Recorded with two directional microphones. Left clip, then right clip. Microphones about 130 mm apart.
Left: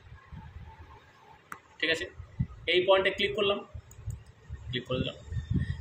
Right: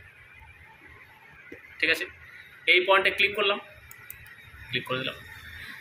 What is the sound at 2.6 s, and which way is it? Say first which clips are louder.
Speech: right 4 dB; 35° left (ahead or behind).